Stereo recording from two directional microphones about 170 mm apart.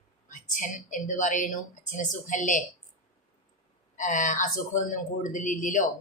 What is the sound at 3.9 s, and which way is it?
Speech, 50° left (ahead or behind).